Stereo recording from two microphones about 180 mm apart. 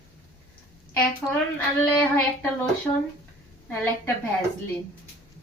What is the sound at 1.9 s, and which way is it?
Speech, 10° left (ahead or behind).